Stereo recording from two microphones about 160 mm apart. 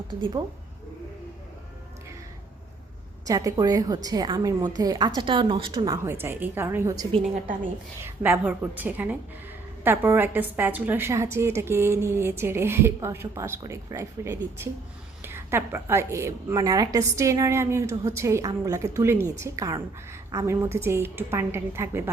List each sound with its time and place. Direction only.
0.1 s a woman's voice: 30° right (ahead or behind)
3.2 s a woman's voice: 20° right (ahead or behind)
6.1 s a woman's voice: 15° right (ahead or behind)